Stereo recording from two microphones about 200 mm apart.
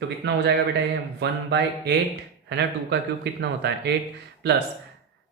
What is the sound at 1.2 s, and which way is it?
Speech, 60° right (ahead or behind).